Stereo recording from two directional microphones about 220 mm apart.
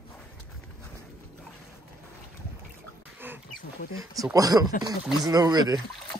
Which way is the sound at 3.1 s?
10° right (ahead or behind).